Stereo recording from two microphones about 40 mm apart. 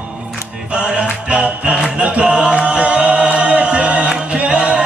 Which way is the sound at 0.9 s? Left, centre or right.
Right.